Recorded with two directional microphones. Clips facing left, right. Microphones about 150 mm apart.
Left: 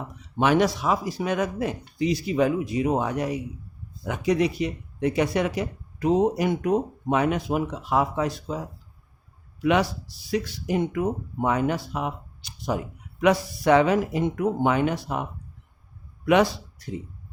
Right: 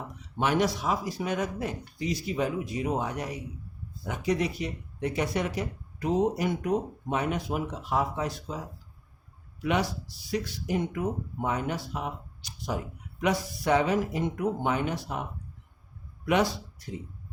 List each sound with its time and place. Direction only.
0.3 s speech: 90° left
2.0 s speech: 75° left (ahead or behind)
10.3 s speech: 90° left
11.3 s speech: 70° left (ahead or behind)
13.2 s speech: 85° left
16.2 s speech: 80° left